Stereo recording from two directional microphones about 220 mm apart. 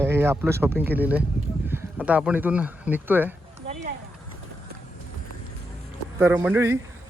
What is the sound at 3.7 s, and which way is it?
Clip-clop, 35° right (ahead or behind).